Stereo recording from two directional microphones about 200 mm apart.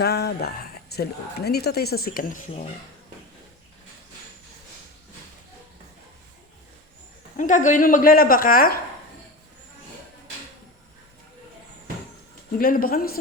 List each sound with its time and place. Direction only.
0.0 s speech: 55° left (ahead or behind)
7.3 s speech: 40° left (ahead or behind)
12.5 s speech: 45° left (ahead or behind)